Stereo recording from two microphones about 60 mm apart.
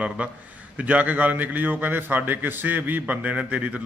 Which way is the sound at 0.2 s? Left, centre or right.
Right.